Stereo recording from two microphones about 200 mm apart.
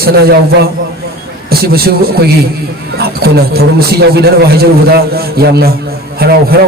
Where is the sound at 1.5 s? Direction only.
50° right (ahead or behind).